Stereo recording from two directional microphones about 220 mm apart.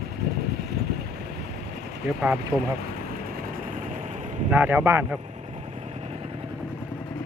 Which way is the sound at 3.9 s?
30° right (ahead or behind).